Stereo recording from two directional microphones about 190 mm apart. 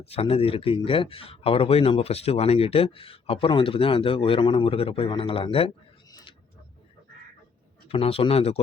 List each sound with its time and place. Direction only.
0.0 s speech: 30° left (ahead or behind)
7.9 s speech: 30° left (ahead or behind)